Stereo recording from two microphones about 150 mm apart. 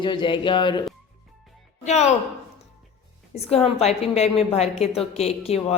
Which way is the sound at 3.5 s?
45° left (ahead or behind).